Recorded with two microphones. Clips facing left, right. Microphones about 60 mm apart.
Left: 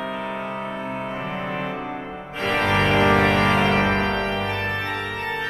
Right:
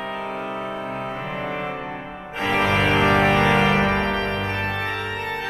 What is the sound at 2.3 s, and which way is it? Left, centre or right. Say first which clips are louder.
Music: right 1 dB; centre.